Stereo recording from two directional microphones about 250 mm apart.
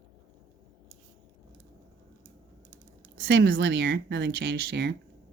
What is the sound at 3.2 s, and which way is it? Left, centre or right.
Speech, right.